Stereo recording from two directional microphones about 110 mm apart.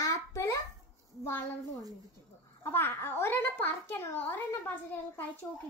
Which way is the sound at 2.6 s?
20° left (ahead or behind).